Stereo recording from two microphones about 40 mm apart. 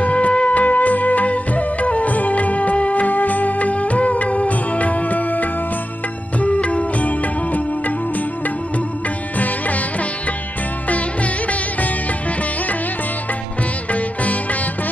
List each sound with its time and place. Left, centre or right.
0.0 s music: left
6.4 s music: left
13.9 s music: left